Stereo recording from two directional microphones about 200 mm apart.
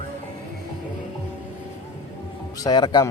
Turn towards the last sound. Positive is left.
turn(degrees=20)  # may be behind; listen again after turning